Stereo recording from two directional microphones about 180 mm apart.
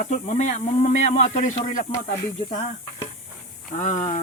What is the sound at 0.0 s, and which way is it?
A man's voice, 40° left (ahead or behind).